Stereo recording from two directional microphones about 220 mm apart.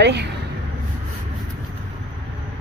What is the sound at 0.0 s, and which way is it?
Speech, 50° right (ahead or behind).